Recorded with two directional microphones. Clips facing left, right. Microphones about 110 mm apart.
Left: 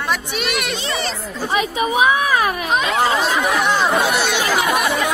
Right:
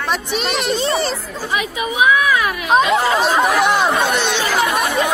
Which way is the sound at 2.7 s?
35° right (ahead or behind).